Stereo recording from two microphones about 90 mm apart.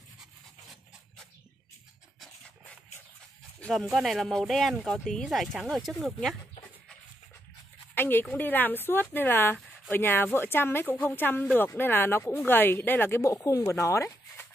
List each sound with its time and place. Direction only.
3.7 s speech: centre (ahead or behind)
7.9 s speech: 20° left (ahead or behind)